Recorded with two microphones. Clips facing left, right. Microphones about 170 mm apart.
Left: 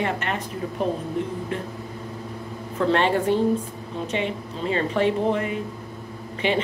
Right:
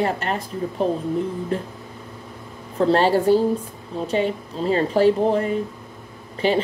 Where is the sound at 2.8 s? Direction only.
35° right (ahead or behind).